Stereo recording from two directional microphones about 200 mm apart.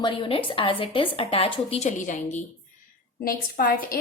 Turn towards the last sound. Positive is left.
turn(degrees=45)  # may be behind; listen again after turning